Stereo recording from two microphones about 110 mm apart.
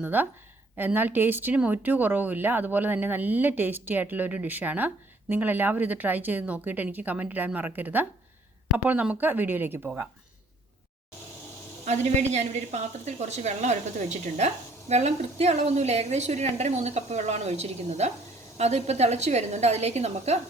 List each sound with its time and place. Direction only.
0.0 s speech: 15° right (ahead or behind)
11.9 s a woman's voice: 90° right